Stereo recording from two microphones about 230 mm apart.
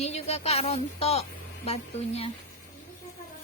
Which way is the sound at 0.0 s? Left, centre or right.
Left.